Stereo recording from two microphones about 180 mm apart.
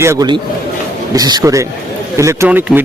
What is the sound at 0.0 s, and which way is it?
A man's voice, 15° right (ahead or behind).